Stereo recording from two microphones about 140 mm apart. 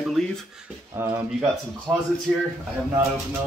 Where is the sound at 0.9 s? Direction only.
20° right (ahead or behind).